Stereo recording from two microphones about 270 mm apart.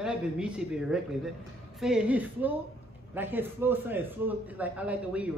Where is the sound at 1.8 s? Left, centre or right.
Centre.